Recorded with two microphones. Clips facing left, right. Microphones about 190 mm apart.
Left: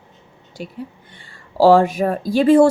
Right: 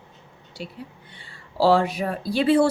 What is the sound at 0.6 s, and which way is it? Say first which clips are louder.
A woman's voice: left 5 dB; 50° left (ahead or behind).